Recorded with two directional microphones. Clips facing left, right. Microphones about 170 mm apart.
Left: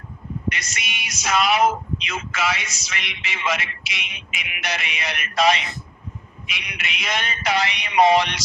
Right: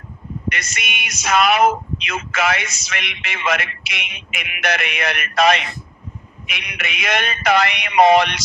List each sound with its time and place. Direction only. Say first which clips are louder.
0.5 s speech: right 4 dB; 55° right (ahead or behind)